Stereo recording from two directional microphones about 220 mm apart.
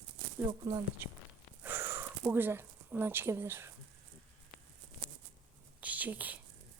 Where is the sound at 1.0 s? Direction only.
10° right (ahead or behind).